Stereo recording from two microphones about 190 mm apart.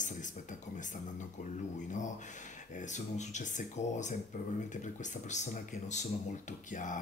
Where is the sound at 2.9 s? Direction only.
40° left (ahead or behind).